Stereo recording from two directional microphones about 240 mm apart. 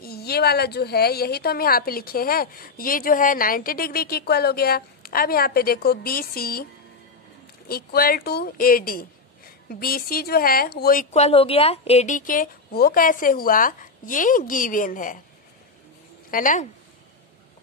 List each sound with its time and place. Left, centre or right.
0.0 s a woman's voice: left
16.3 s a woman's voice: left